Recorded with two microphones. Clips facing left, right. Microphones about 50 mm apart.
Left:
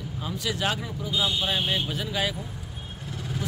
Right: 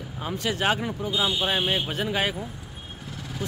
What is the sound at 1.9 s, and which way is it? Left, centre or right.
Speech, right.